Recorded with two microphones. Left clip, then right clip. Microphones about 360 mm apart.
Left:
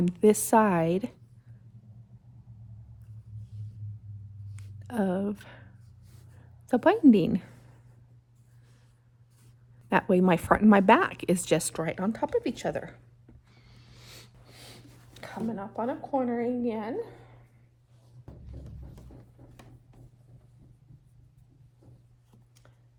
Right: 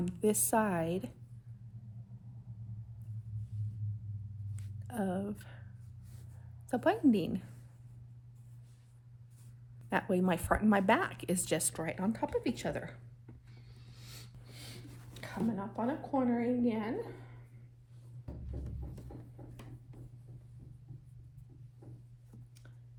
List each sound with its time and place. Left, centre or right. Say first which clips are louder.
0.0 s speech: left 10 dB; left
4.5 s a sound: left 8 dB; left
6.7 s speech: left 8 dB; left
9.9 s speech: left 9 dB; left
13.7 s a sound: left 4 dB; left
14.5 s speech: left 1 dB; left